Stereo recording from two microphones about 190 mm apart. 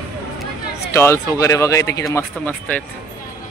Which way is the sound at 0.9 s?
15° left (ahead or behind).